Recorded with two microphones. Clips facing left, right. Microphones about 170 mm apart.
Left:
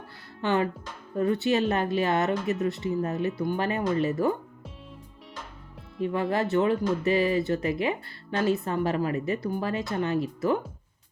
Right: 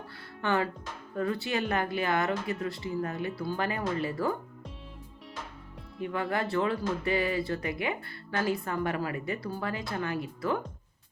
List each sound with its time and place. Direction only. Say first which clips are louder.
0.4 s speech: left 3 dB; 20° left (ahead or behind)
6.0 s speech: left 5 dB; 25° left (ahead or behind)